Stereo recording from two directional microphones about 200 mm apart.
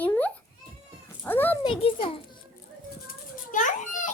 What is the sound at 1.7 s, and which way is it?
Speech, 25° left (ahead or behind).